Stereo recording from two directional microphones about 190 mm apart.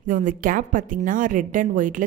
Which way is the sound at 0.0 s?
45° right (ahead or behind).